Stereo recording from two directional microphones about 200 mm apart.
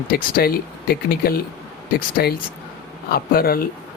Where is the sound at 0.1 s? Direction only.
45° left (ahead or behind).